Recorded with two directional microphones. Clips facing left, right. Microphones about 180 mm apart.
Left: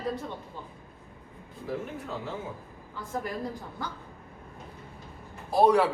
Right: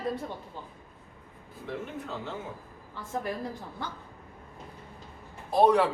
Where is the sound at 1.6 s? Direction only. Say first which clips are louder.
Left 2 dB; 5° left (ahead or behind).